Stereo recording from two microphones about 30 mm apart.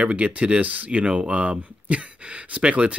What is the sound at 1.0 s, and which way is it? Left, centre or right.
Speech, right.